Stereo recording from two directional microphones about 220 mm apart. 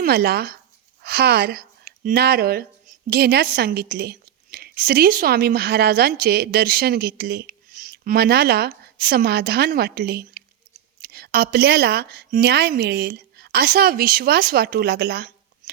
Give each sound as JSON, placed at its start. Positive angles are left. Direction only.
{"t": 0.0, "sound": "a woman's voice", "side_deg": -45}